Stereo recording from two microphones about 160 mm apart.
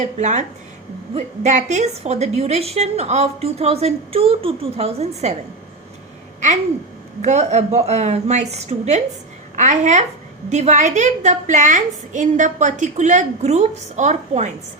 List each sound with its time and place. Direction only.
0.2 s a woman's voice: 50° right (ahead or behind)
7.2 s a woman's voice: 45° right (ahead or behind)